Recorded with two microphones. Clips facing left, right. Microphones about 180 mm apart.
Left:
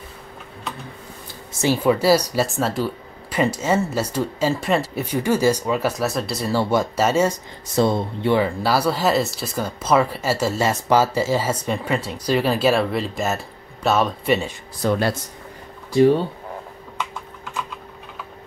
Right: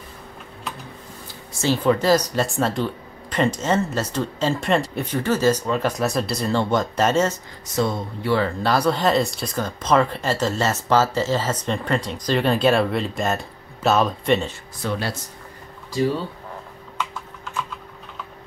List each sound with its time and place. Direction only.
1.6 s speech: 10° left (ahead or behind)
7.7 s speech: 30° left (ahead or behind)
8.4 s speech: 10° left (ahead or behind)
14.8 s speech: 45° left (ahead or behind)